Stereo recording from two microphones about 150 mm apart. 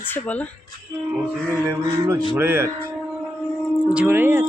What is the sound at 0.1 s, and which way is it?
Speech, 10° left (ahead or behind).